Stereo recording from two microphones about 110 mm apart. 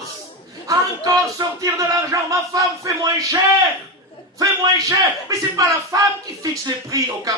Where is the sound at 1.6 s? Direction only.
30° right (ahead or behind).